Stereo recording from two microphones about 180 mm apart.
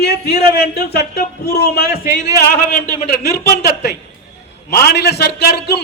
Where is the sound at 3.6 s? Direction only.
65° left (ahead or behind).